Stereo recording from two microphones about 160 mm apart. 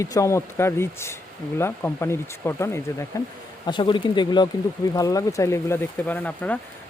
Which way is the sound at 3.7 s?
30° left (ahead or behind).